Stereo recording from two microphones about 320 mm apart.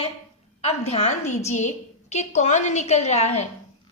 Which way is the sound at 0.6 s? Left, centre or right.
Centre.